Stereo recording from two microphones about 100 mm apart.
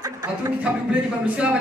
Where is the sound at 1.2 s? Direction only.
10° right (ahead or behind).